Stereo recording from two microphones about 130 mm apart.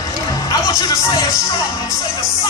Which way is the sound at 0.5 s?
25° left (ahead or behind).